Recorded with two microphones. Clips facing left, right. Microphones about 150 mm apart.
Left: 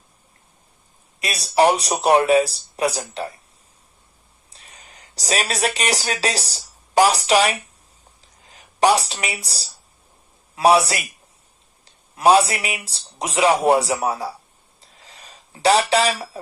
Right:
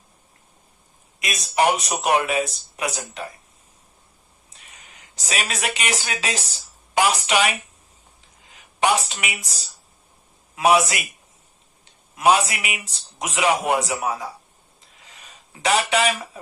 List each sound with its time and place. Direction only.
1.2 s a man's voice: 35° left (ahead or behind)
4.4 s a man's voice: 35° left (ahead or behind)
14.8 s a sound: 35° left (ahead or behind)